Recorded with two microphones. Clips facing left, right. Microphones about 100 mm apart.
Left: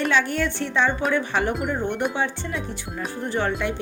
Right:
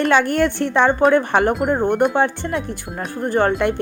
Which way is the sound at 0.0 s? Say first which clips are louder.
Right 6 dB; 55° right (ahead or behind).